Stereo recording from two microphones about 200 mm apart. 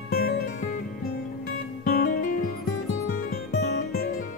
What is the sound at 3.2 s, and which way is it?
Music, 55° left (ahead or behind).